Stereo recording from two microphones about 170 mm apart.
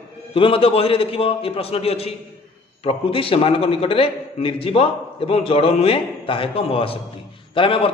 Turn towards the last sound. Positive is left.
turn(degrees=30)  # may be behind; listen again after turning